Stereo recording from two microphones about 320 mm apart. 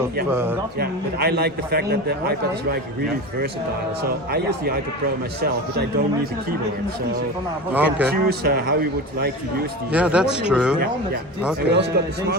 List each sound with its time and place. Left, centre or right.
0.3 s speech: centre
0.8 s a man's voice: right
4.3 s a man's voice: right
7.7 s a man's voice: centre
8.1 s a man's voice: right
9.9 s a man's voice: centre
11.7 s a man's voice: right